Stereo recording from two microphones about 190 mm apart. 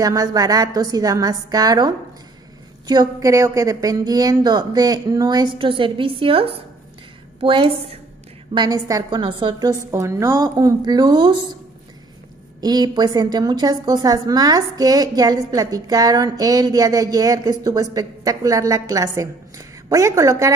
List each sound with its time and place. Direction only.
0.0 s a woman's voice: 20° right (ahead or behind)
12.5 s a woman's voice: 20° right (ahead or behind)